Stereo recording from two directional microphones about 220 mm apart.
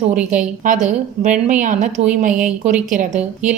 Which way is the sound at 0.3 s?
35° right (ahead or behind).